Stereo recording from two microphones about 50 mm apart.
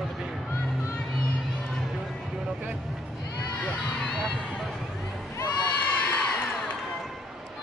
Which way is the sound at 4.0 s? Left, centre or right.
Centre.